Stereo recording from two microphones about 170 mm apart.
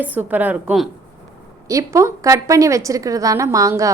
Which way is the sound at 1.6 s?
20° right (ahead or behind).